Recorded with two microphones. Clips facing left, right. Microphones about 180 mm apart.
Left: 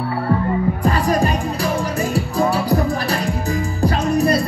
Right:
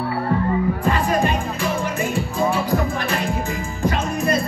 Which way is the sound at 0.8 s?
35° left (ahead or behind).